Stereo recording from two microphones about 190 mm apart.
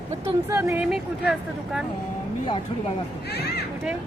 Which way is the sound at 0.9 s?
5° right (ahead or behind).